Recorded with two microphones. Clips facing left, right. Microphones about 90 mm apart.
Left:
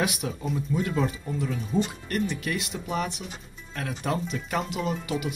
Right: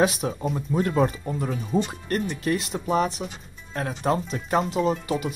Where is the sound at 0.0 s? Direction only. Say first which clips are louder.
Right 6 dB; 35° right (ahead or behind).